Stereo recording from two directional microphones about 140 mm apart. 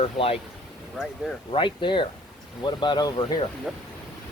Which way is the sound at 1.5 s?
35° left (ahead or behind).